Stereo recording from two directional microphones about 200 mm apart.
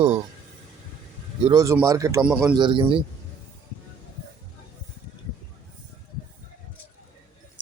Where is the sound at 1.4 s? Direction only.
20° right (ahead or behind).